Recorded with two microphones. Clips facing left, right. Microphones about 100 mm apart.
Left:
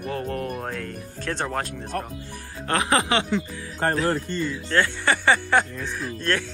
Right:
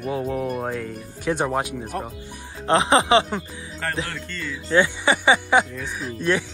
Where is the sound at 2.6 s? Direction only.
25° right (ahead or behind).